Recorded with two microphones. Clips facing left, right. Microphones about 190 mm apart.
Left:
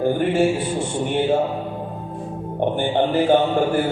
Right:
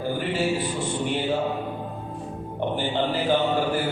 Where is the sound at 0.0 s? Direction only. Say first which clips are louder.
Left 8 dB; 50° left (ahead or behind).